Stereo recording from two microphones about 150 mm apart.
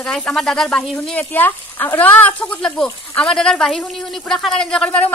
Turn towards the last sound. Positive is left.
turn(degrees=5)  # may be behind; listen again after turning